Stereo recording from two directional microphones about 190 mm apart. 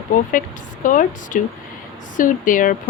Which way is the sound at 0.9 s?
45° left (ahead or behind).